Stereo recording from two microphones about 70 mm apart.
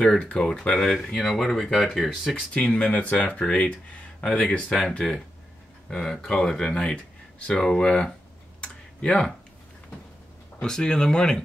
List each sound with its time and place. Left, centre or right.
0.1 s speech: centre
2.5 s speech: centre
5.9 s speech: centre
8.5 s typing: centre
10.6 s speech: centre